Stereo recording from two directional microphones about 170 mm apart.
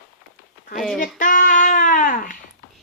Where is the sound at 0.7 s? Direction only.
Centre (ahead or behind).